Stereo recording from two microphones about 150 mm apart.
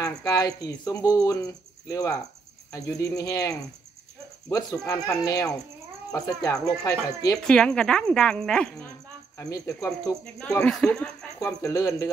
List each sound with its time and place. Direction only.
0.0 s speech: 25° left (ahead or behind)
7.4 s speech: 5° left (ahead or behind)
9.4 s speech: 20° left (ahead or behind)
10.6 s speech: 5° left (ahead or behind)
11.3 s speech: 20° left (ahead or behind)